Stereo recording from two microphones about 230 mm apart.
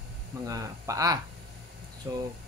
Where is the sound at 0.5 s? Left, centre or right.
Centre.